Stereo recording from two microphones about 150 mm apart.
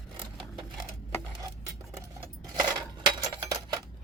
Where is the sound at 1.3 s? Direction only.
25° right (ahead or behind).